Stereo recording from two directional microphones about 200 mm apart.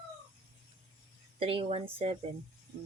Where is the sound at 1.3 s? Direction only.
25° right (ahead or behind).